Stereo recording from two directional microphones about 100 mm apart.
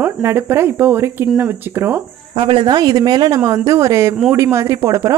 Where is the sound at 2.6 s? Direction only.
40° right (ahead or behind).